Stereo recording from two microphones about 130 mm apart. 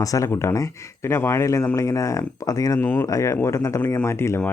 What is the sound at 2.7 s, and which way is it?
Speech, 15° left (ahead or behind).